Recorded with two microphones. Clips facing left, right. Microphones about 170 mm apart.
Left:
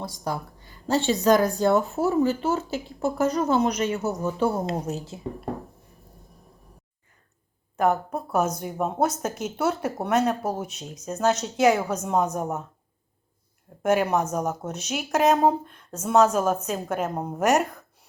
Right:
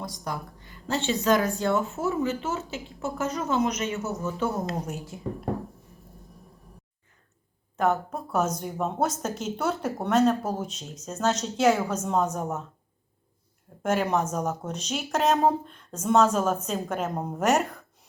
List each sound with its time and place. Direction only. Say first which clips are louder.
0.0 s speech: left 3 dB; 30° left (ahead or behind)
7.8 s speech: left 2 dB; 10° left (ahead or behind)
13.8 s speech: left 3 dB; 10° left (ahead or behind)